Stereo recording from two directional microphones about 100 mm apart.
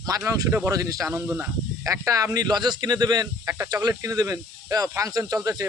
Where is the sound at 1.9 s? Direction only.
35° right (ahead or behind).